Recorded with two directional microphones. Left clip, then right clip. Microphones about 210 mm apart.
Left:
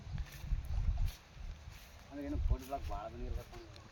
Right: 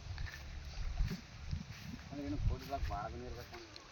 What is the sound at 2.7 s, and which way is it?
Speech, 30° right (ahead or behind).